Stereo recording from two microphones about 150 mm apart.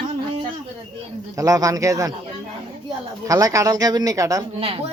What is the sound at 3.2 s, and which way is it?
Speech, 25° right (ahead or behind).